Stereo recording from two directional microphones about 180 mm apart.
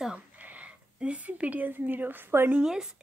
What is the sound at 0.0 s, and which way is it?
A woman's voice, 5° right (ahead or behind).